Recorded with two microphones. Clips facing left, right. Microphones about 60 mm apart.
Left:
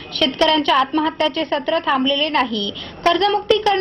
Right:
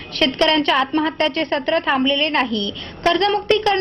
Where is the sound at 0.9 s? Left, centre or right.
Right.